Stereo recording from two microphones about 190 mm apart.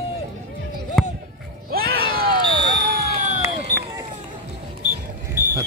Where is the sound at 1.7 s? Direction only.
50° right (ahead or behind).